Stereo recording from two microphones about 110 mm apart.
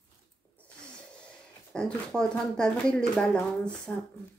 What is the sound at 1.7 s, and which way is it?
Speech, 5° left (ahead or behind).